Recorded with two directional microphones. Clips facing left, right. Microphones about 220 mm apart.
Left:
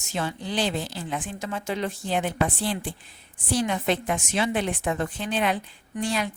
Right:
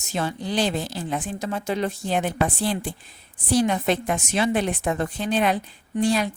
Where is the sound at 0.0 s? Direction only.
40° right (ahead or behind).